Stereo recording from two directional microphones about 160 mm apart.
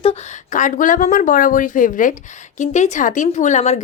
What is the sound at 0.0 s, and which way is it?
A woman's voice, 45° left (ahead or behind).